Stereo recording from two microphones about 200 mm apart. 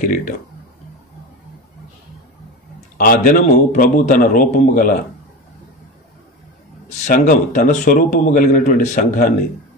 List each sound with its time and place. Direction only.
0.0 s a man's voice: 40° left (ahead or behind)
3.0 s a man's voice: 45° left (ahead or behind)
7.0 s a man's voice: 40° left (ahead or behind)